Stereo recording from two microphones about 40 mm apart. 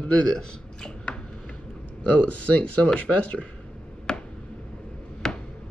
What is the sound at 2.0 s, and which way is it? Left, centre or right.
Speech, left.